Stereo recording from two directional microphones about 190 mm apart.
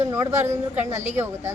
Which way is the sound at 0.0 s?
15° right (ahead or behind).